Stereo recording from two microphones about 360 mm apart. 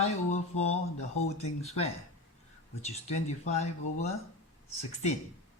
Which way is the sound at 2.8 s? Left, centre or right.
Centre.